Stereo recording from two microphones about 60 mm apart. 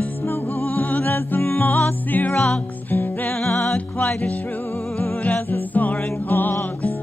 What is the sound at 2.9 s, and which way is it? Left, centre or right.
Music, left.